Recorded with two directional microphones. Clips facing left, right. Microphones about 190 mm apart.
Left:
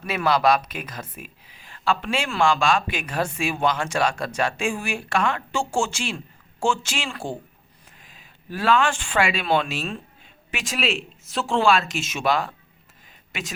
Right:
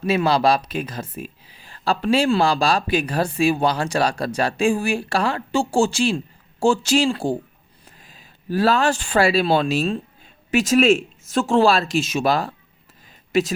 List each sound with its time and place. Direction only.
0.0 s speech: 30° right (ahead or behind)